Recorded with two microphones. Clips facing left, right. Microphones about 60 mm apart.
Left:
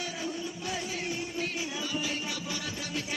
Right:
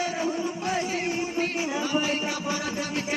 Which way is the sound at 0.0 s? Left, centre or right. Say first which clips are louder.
Right 8 dB; right.